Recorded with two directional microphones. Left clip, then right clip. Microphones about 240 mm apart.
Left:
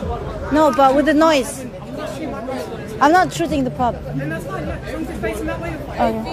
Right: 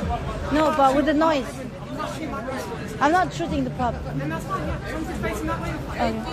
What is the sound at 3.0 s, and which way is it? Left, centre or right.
Speech, left.